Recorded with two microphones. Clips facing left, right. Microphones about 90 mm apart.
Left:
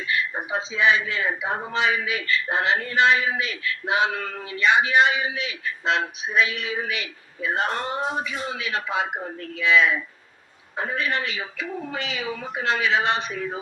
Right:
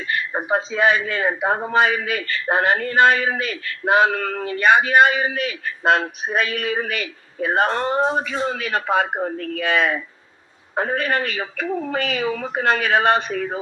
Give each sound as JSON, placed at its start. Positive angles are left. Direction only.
{"t": 0.0, "sound": "a man's voice", "side_deg": -50}
{"t": 8.4, "sound": "a man's voice", "side_deg": -50}